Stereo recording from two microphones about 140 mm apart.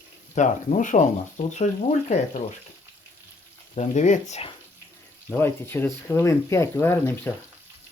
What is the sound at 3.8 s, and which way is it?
Speech, 60° left (ahead or behind).